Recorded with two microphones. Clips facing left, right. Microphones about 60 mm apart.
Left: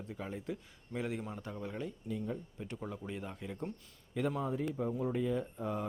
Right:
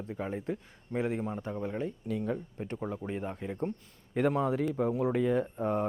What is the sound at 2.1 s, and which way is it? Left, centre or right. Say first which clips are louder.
Speech: right 6 dB; right.